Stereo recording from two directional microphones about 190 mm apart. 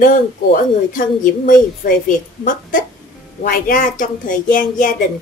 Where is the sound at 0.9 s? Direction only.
45° left (ahead or behind).